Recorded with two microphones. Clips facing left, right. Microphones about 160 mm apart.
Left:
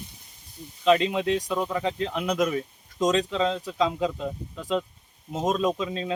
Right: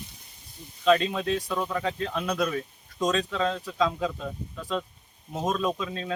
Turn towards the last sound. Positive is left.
turn(degrees=20)  # may be behind; listen again after turning